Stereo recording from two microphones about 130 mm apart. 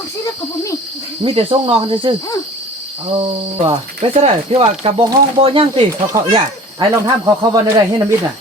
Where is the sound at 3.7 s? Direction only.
50° right (ahead or behind).